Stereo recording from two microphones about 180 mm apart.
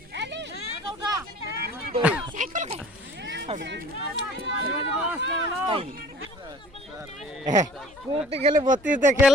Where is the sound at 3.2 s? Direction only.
80° right.